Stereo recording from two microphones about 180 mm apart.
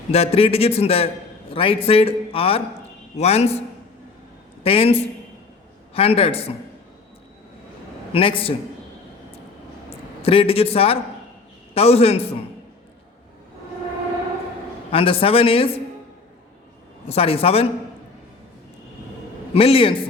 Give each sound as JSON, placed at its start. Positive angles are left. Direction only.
{"t": 0.1, "sound": "a man's voice", "side_deg": 35}
{"t": 4.6, "sound": "a man's voice", "side_deg": 35}
{"t": 8.1, "sound": "a man's voice", "side_deg": 30}
{"t": 10.2, "sound": "a man's voice", "side_deg": 30}
{"t": 14.9, "sound": "a man's voice", "side_deg": 30}
{"t": 17.1, "sound": "a man's voice", "side_deg": 30}
{"t": 19.5, "sound": "a man's voice", "side_deg": 30}